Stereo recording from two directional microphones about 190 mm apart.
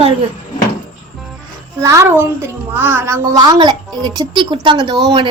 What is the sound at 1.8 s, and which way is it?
A child's voice, 15° right (ahead or behind).